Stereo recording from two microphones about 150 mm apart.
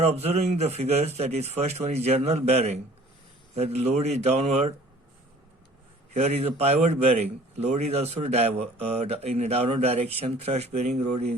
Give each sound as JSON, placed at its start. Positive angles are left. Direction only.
{"t": 0.0, "sound": "a man's voice", "side_deg": -45}
{"t": 6.1, "sound": "a man's voice", "side_deg": -45}